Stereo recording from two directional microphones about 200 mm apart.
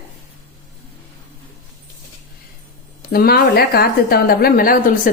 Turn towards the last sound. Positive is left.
turn(degrees=45)  # may be behind; listen again after turning